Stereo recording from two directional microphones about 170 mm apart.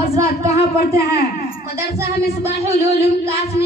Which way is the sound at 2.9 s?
75° left (ahead or behind).